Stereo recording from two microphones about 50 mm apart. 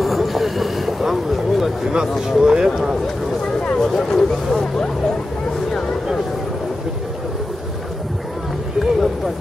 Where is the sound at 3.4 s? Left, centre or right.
Centre.